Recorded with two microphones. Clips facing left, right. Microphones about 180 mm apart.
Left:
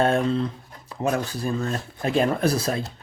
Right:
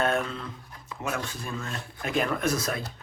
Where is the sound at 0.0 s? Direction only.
30° left (ahead or behind).